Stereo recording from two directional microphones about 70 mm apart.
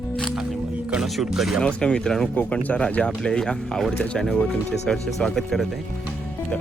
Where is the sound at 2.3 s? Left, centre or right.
Centre.